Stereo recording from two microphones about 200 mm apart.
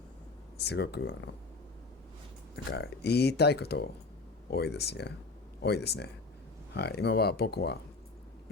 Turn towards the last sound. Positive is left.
turn(degrees=55)  # may be behind; listen again after turning